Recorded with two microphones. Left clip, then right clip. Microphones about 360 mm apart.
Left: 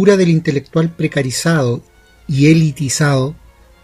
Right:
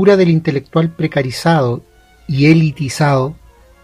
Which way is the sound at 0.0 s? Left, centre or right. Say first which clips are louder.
Right 1 dB; right.